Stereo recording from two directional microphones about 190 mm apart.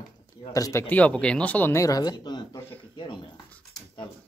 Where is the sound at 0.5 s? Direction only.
20° left (ahead or behind).